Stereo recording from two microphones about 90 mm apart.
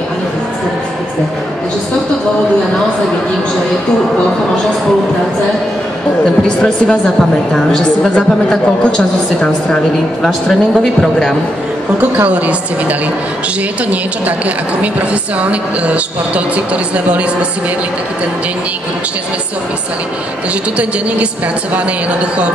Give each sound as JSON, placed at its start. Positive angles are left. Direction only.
{"t": 6.4, "sound": "a woman's voice", "side_deg": 10}
{"t": 12.2, "sound": "speech", "side_deg": -15}
{"t": 14.2, "sound": "speech", "side_deg": -15}